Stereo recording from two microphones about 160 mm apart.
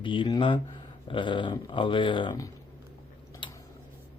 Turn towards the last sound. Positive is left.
turn(degrees=30)  # may be behind; listen again after turning